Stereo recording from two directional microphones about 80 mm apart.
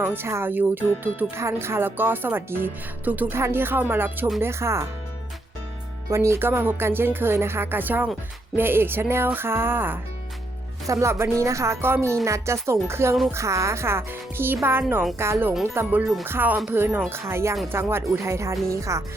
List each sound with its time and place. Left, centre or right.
0.0 s speech: right
6.1 s speech: right
10.8 s speech: right